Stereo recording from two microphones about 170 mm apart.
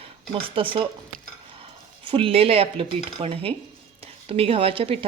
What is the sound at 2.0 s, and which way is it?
A woman's voice, 30° right (ahead or behind).